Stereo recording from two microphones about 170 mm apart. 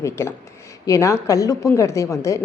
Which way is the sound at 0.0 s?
15° left (ahead or behind).